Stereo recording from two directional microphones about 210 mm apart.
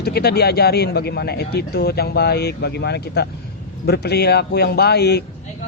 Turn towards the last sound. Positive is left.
turn(degrees=50)  # may be behind; listen again after turning